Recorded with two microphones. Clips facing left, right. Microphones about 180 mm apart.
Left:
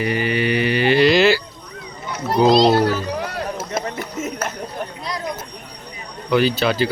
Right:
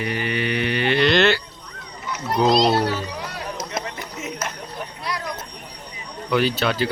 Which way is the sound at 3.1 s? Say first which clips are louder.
Left 7 dB; 50° left (ahead or behind).